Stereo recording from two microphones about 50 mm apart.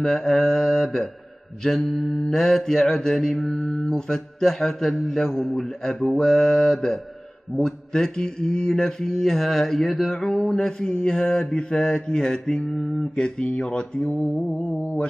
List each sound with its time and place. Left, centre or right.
0.0 s mantra: centre
12.4 s mantra: centre
13.1 s mantra: centre